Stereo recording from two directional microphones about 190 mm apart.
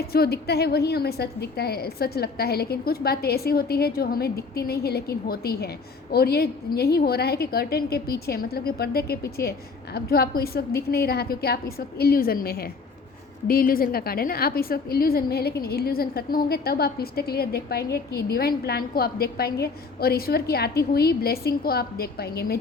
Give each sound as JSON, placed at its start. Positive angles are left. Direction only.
{"t": 0.1, "sound": "a woman's voice", "side_deg": 55}